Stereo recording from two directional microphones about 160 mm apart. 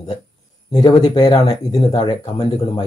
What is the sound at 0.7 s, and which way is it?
Speech, 30° left (ahead or behind).